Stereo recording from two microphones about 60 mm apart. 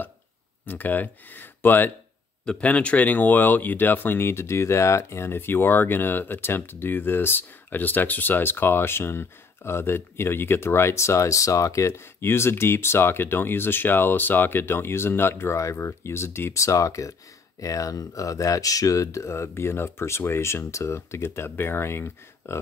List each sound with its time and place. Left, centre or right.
0.7 s speech: left
2.4 s speech: left
16.5 s speech: left